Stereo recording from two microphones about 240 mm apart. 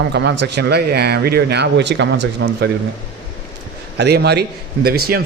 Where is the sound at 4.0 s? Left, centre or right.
Right.